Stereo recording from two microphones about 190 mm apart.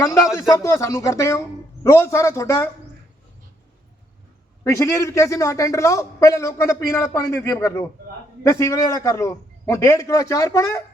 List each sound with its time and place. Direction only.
0.6 s a man's voice: 15° left (ahead or behind)
4.6 s a man's voice: 15° left (ahead or behind)